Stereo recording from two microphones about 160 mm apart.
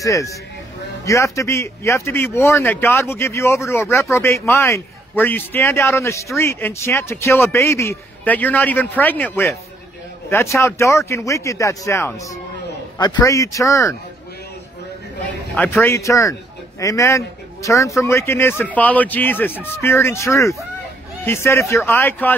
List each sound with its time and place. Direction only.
0.0 s a man's voice: 20° left (ahead or behind)
10.3 s speech: 20° left (ahead or behind)
15.5 s a man's voice: 10° left (ahead or behind)